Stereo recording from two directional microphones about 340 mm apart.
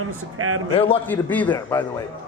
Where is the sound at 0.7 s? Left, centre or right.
Centre.